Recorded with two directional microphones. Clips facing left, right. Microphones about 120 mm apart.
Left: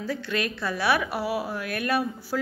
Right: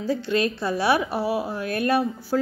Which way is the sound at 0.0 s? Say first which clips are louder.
Right 6 dB; 25° right (ahead or behind).